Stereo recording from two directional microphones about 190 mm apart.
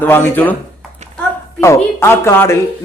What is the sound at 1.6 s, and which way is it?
Speech, 15° left (ahead or behind).